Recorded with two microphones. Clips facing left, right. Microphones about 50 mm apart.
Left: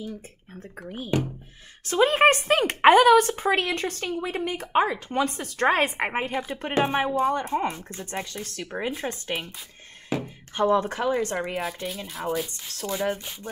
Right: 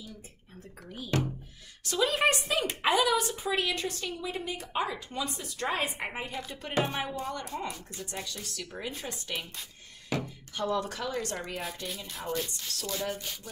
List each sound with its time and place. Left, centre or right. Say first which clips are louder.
0.6 s speech: left 7 dB; left
10.0 s music: left 4 dB; left
10.5 s speech: left 9 dB; left
11.1 s a sound: left 9 dB; left
11.6 s speech: left 6 dB; centre
12.6 s a sound: left 7 dB; left